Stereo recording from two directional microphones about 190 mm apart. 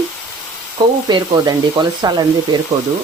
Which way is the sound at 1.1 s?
20° right (ahead or behind).